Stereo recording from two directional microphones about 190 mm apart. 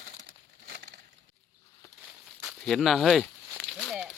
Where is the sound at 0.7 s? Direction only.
65° right (ahead or behind).